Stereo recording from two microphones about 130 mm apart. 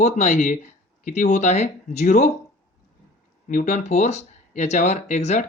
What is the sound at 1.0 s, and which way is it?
Speech, 70° left (ahead or behind).